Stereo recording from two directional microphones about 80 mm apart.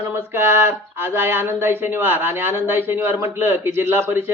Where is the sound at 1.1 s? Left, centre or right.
Right.